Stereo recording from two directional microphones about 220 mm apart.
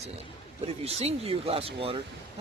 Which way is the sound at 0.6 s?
30° right (ahead or behind).